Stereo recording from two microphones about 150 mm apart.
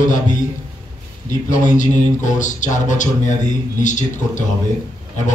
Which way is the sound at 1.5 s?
60° left (ahead or behind).